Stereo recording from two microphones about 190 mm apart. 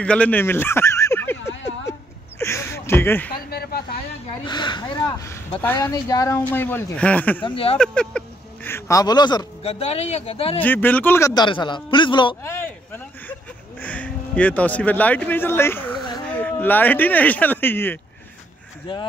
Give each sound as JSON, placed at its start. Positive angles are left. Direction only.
{"t": 0.0, "sound": "a sound", "side_deg": 5}
{"t": 3.3, "sound": "a sound", "side_deg": 55}
{"t": 4.5, "sound": "a man's voice", "side_deg": 25}
{"t": 7.4, "sound": "a man's voice", "side_deg": 30}
{"t": 7.7, "sound": "a man's voice", "side_deg": 5}
{"t": 10.6, "sound": "a man's voice", "side_deg": 10}
{"t": 12.4, "sound": "music", "side_deg": 10}
{"t": 15.9, "sound": "a sound", "side_deg": 20}
{"t": 16.3, "sound": "speech", "side_deg": 5}
{"t": 18.9, "sound": "a man's voice", "side_deg": 25}